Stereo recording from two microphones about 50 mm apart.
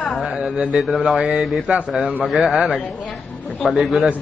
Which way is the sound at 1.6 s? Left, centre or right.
Centre.